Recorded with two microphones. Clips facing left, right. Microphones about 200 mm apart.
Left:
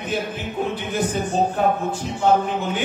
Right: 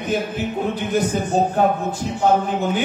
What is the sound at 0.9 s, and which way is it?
A man's voice, 40° right (ahead or behind).